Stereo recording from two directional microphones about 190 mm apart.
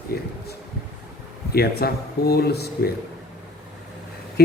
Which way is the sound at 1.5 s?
55° left (ahead or behind).